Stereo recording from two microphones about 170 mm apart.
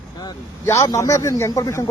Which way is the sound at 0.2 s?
20° left (ahead or behind).